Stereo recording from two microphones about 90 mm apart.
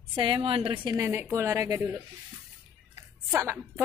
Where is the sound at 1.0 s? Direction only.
30° right (ahead or behind).